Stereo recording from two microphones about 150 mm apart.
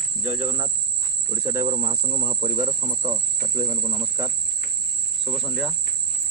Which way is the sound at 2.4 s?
45° right (ahead or behind).